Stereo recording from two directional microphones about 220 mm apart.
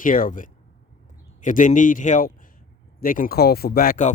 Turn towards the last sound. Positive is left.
turn(degrees=40)  # may be behind; listen again after turning